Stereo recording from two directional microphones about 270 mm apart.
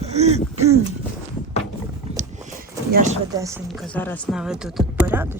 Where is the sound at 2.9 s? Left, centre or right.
Right.